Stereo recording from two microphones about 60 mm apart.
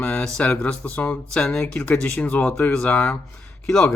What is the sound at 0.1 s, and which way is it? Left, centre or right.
A man's voice, centre.